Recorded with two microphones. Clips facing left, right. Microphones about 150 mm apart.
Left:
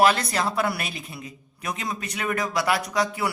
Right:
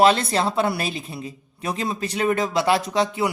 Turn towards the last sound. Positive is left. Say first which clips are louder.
# right 3 dB
turn(degrees=-25)  # may be behind; listen again after turning